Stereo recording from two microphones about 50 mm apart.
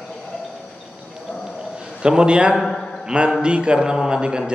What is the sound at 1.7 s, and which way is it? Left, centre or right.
Speech, centre.